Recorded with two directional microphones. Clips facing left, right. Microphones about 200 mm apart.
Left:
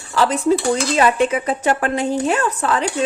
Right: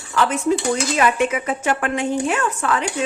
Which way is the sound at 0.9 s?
30° left (ahead or behind).